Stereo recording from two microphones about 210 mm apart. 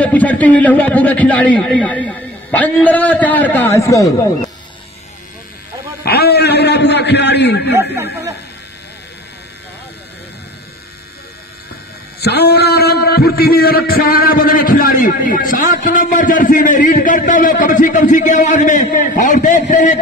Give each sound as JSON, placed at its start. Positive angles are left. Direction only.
{"t": 0.0, "sound": "a man's voice", "side_deg": 5}
{"t": 6.0, "sound": "a man's voice", "side_deg": 50}
{"t": 7.7, "sound": "speech", "side_deg": -15}
{"t": 12.2, "sound": "a man's voice", "side_deg": 50}